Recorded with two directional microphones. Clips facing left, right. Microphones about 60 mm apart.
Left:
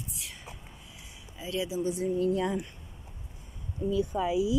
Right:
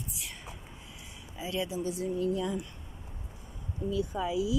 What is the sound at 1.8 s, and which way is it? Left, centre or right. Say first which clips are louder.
Speech: left 3 dB; left.